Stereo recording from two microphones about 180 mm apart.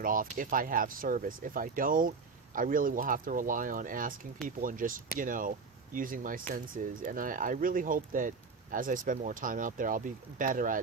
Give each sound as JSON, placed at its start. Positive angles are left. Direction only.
{"t": 0.0, "sound": "speech", "side_deg": -50}